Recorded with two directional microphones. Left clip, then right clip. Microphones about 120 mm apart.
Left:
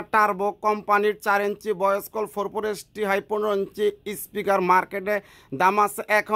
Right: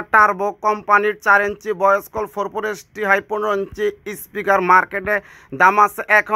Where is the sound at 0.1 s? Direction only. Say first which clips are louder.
Right 7 dB; 35° left (ahead or behind).